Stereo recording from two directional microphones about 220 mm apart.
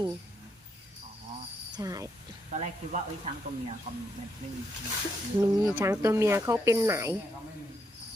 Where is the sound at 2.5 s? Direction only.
35° right (ahead or behind).